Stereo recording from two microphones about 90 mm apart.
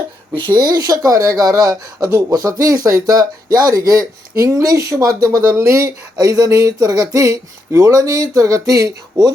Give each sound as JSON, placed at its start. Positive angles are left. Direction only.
{"t": 0.5, "sound": "speech", "side_deg": -45}